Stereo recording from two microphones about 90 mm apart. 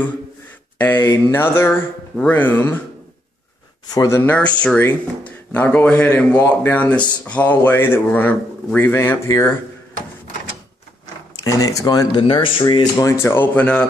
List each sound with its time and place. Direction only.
0.7 s speech: 20° left (ahead or behind)
4.2 s speech: 15° left (ahead or behind)
11.4 s speech: 40° left (ahead or behind)
12.2 s speech: 75° left (ahead or behind)
12.8 s speech: 35° left (ahead or behind); by 13.8 s 15° left (ahead or behind)